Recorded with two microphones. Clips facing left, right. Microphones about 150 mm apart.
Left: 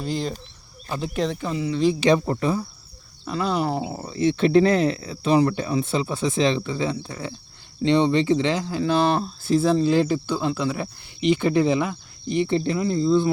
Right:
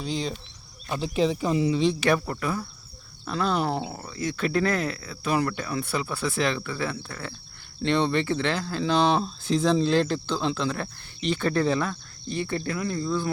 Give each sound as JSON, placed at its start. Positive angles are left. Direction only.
{"t": 0.0, "sound": "speech", "side_deg": 5}
{"t": 1.5, "sound": "speech", "side_deg": -20}
{"t": 2.0, "sound": "speech", "side_deg": 25}
{"t": 3.2, "sound": "speech", "side_deg": 5}
{"t": 4.0, "sound": "speech", "side_deg": 25}